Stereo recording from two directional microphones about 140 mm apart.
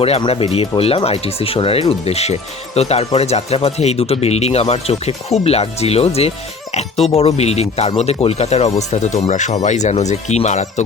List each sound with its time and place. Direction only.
0.2 s speech: 40° left (ahead or behind)